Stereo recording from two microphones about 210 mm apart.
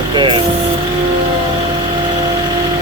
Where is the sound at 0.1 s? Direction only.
25° right (ahead or behind).